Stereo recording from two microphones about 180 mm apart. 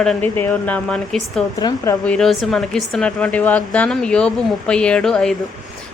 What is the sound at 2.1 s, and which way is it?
Speech, centre (ahead or behind).